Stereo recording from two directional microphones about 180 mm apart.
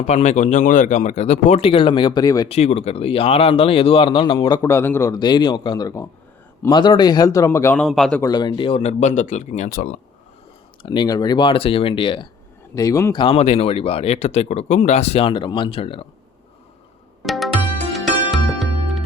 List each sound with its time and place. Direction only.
0.0 s speech: 40° left (ahead or behind); by 2.5 s 20° left (ahead or behind)
2.5 s speech: 35° left (ahead or behind); by 7.8 s 15° left (ahead or behind)
7.8 s a man's voice: centre (ahead or behind)
8.2 s speech: 25° left (ahead or behind); by 10.0 s 50° left (ahead or behind)
10.8 s speech: 25° left (ahead or behind)
13.2 s speech: 35° left (ahead or behind)
17.2 s music: centre (ahead or behind)